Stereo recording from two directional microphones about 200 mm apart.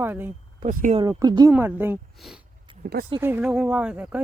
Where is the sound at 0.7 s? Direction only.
40° right (ahead or behind).